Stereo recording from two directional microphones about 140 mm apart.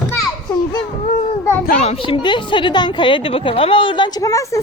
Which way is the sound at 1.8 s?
45° left (ahead or behind).